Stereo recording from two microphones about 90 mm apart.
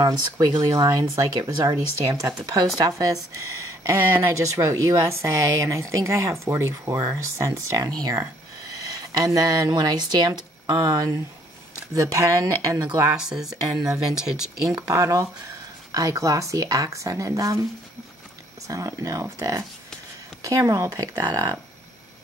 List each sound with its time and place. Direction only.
0.7 s speech: 40° right (ahead or behind)
13.1 s speech: 10° right (ahead or behind)
14.9 s speech: 40° right (ahead or behind)
18.7 s speech: 40° right (ahead or behind)